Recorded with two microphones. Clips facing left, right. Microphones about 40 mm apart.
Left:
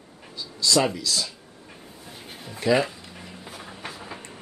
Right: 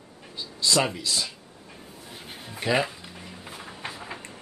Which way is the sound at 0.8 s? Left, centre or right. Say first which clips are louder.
Left 2 dB; right.